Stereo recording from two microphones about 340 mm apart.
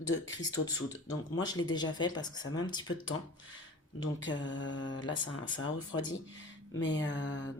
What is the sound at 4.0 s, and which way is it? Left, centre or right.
Speech, left.